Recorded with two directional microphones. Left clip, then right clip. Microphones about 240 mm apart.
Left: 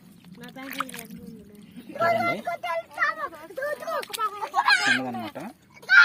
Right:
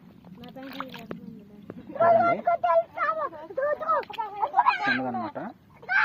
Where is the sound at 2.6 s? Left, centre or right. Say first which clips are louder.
Right 1 dB; left.